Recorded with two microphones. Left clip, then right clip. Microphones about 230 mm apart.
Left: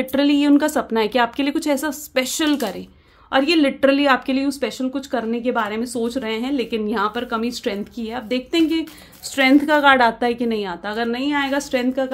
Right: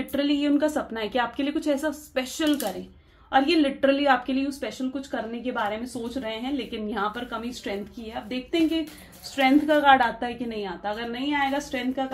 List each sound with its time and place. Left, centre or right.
0.1 s speech: left